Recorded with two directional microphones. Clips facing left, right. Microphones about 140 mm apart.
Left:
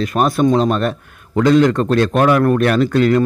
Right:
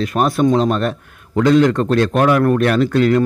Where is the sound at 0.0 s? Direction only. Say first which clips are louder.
Left 1 dB; 45° left (ahead or behind).